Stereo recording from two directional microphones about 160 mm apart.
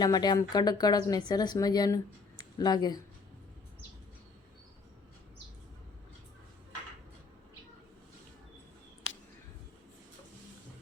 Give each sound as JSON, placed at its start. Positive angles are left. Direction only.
{"t": 0.0, "sound": "speech", "side_deg": 25}